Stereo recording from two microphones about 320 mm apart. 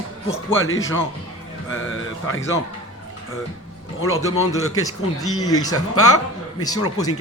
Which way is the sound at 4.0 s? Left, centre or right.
Left.